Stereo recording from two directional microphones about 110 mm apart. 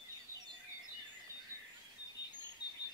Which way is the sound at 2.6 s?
40° left (ahead or behind).